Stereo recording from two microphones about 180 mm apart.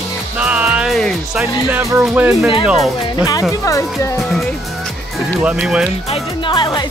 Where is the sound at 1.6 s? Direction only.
10° right (ahead or behind).